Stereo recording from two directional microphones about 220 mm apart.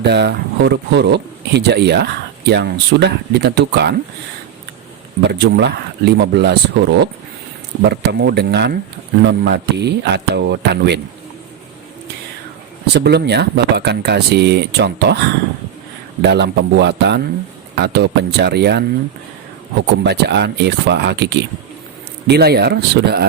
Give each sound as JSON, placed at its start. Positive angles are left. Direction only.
{"t": 0.0, "sound": "speech", "side_deg": -50}
{"t": 5.2, "sound": "speech", "side_deg": -50}
{"t": 12.8, "sound": "speech", "side_deg": -50}
{"t": 16.2, "sound": "speech", "side_deg": -50}
{"t": 20.1, "sound": "speech", "side_deg": -50}